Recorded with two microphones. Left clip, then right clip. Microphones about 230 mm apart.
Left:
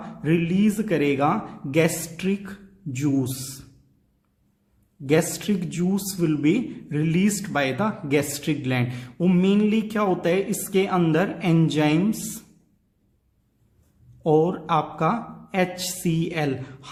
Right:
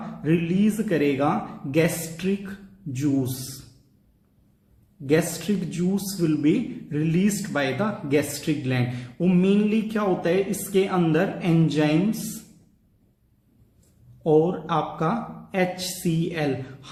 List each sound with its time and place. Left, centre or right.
0.2 s speech: left
5.0 s a man's voice: left
14.3 s a man's voice: left